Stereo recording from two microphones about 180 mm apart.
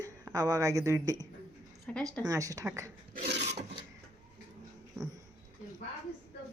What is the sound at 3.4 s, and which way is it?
Filing, 40° right (ahead or behind).